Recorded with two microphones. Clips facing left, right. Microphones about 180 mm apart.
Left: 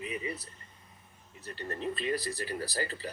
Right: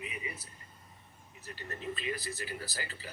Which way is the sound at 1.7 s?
35° left (ahead or behind).